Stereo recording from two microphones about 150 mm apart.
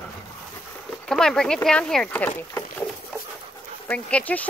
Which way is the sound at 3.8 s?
10° left (ahead or behind).